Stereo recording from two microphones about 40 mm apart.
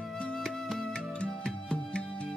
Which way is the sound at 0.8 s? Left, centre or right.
Left.